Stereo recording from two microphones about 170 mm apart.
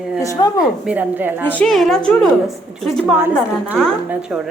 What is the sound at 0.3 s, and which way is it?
Speech, 25° left (ahead or behind).